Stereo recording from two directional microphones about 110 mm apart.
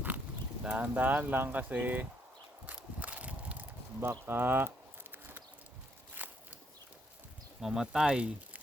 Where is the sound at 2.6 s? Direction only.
10° right (ahead or behind).